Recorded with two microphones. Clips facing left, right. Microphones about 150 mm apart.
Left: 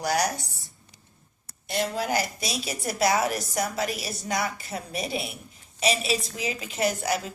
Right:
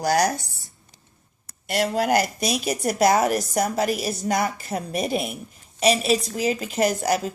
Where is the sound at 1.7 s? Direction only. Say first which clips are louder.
Right 6 dB; 65° right (ahead or behind).